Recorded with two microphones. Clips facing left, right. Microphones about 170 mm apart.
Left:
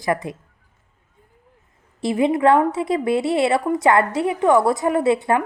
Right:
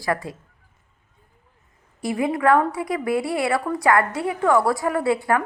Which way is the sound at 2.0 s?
25° left (ahead or behind).